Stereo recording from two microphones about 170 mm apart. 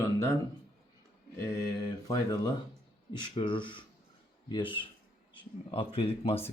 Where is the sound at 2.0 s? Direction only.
20° left (ahead or behind).